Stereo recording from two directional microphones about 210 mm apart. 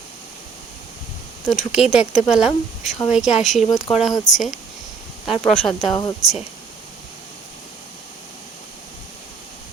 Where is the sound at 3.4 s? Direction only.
35° left (ahead or behind).